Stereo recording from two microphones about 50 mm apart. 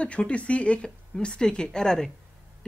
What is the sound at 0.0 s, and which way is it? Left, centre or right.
Speech, left.